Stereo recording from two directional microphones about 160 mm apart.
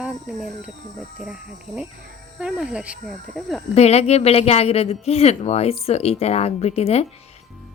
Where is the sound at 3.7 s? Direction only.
40° left (ahead or behind).